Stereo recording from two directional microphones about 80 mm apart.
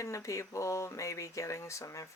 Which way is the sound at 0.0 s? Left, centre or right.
Left.